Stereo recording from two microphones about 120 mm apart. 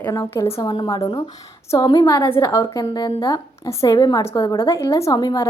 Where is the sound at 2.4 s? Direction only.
25° left (ahead or behind).